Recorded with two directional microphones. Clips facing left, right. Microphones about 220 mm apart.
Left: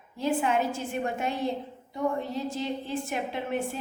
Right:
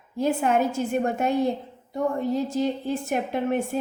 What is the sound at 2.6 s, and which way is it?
A woman's voice, 45° right (ahead or behind).